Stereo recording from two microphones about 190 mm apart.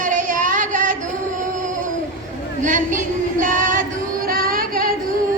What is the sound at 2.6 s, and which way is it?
Female singing, 45° right (ahead or behind).